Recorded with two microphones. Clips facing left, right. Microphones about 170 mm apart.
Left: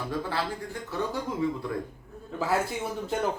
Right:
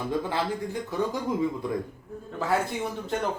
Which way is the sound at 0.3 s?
15° right (ahead or behind).